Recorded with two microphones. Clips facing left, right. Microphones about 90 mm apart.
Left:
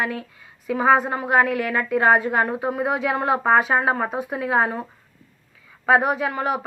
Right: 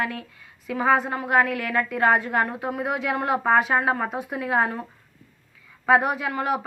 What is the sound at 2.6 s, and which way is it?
Speech, 35° left (ahead or behind).